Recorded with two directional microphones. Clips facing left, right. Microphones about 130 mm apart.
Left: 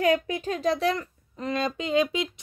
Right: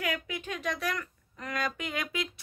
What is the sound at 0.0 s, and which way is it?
Speech, 30° left (ahead or behind).